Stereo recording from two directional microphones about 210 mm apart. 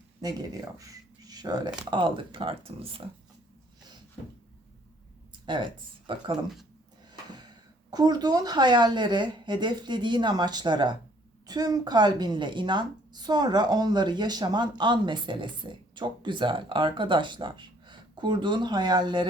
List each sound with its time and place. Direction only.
0.2 s speech: 15° right (ahead or behind)
6.1 s speech: 25° right (ahead or behind)